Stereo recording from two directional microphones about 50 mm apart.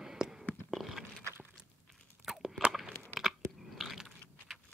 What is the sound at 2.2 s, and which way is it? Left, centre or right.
Crunch, centre.